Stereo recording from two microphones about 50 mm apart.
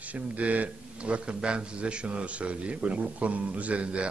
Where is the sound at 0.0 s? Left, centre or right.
Right.